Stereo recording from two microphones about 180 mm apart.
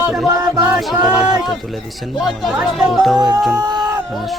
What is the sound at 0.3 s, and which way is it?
Music, 20° right (ahead or behind).